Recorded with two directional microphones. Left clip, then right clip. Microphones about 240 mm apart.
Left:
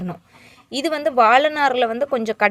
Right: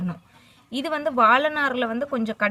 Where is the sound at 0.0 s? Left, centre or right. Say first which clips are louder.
Left 3 dB; left.